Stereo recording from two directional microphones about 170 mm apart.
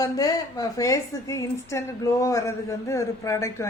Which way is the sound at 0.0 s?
20° left (ahead or behind).